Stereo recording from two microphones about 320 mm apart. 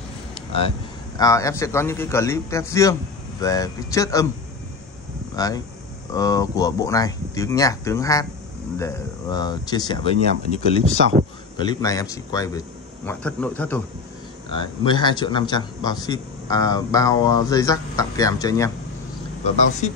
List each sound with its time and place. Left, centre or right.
0.3 s speech: centre
5.3 s a man's voice: centre
11.5 s a man's voice: centre
19.4 s a man's voice: left